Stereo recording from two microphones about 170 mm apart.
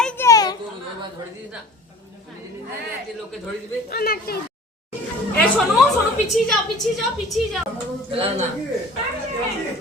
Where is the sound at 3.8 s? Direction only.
60° left (ahead or behind).